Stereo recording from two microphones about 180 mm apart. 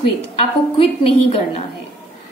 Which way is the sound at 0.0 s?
30° left (ahead or behind).